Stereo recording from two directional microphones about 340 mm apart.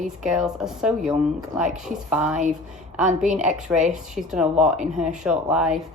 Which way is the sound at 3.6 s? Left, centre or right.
Centre.